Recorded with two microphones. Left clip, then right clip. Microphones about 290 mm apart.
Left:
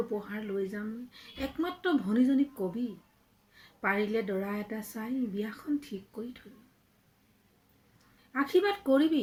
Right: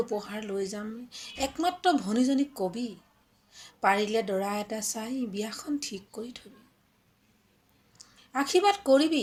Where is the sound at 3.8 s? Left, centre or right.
Right.